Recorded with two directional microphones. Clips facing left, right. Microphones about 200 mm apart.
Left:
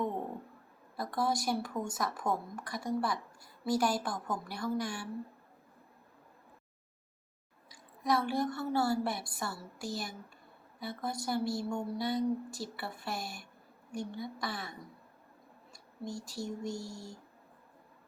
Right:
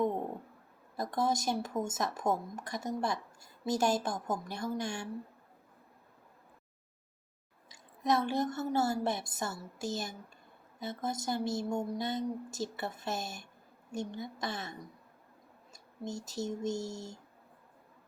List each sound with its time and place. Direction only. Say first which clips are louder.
0.9 s speech: right 1 dB; 20° right (ahead or behind)
8.0 s speech: right 1 dB; 20° right (ahead or behind)
15.7 s a sound: right 1 dB; 20° right (ahead or behind)